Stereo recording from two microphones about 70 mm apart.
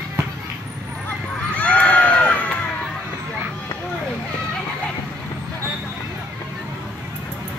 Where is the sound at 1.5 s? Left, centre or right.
Centre.